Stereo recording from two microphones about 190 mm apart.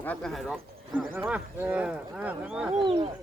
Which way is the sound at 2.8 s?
30° right (ahead or behind).